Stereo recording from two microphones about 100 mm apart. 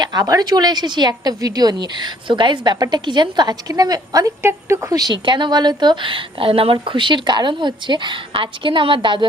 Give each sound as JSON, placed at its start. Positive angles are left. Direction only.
{"t": 0.0, "sound": "a woman's voice", "side_deg": -40}
{"t": 5.1, "sound": "a woman's voice", "side_deg": -55}